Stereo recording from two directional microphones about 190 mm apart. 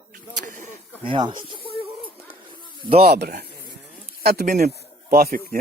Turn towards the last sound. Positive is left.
turn(degrees=-50)  # may be behind; listen again after turning